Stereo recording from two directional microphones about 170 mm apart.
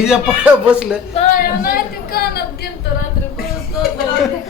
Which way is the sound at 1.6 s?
60° left (ahead or behind).